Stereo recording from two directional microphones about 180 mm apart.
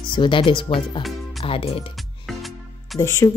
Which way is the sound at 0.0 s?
25° left (ahead or behind).